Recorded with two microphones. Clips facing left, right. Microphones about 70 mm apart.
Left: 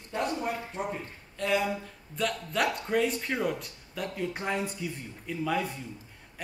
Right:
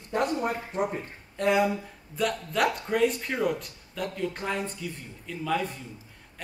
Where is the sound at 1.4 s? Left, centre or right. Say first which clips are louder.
Right 5 dB; centre.